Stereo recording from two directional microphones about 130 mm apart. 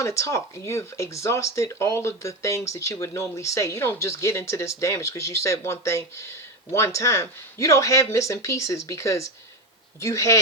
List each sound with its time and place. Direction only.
0.0 s speech: 25° left (ahead or behind)